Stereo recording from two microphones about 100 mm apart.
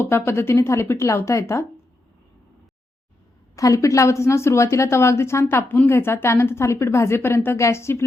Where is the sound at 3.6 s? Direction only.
30° left (ahead or behind).